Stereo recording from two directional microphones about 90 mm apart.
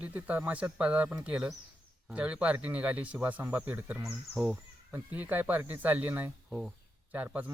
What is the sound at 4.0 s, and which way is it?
Speech, 5° right (ahead or behind).